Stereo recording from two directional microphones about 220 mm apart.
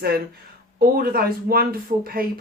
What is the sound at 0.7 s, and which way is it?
Speech, 40° right (ahead or behind).